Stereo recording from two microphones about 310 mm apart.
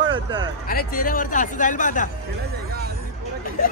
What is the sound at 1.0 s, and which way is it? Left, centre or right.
Speech, left.